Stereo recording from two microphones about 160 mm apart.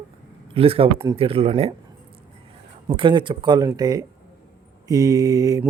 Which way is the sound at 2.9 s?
30° right (ahead or behind).